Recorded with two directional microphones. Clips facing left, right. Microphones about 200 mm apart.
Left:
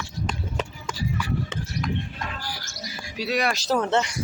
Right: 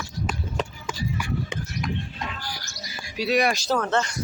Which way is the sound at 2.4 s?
10° left (ahead or behind).